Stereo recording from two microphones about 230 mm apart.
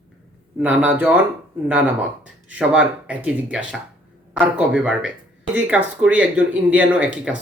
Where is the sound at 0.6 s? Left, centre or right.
Centre.